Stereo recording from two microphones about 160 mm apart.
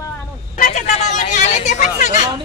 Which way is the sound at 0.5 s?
50° left (ahead or behind).